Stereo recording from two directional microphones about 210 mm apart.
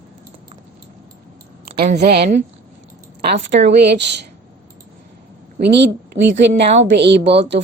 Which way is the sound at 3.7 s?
50° right (ahead or behind).